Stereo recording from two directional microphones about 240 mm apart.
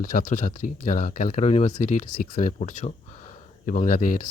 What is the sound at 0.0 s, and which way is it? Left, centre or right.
Speech, left.